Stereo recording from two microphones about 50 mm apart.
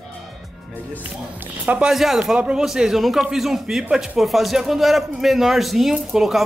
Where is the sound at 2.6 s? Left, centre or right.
Centre.